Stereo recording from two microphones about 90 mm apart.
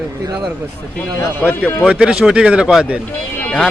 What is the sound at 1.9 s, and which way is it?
Speech, 10° right (ahead or behind).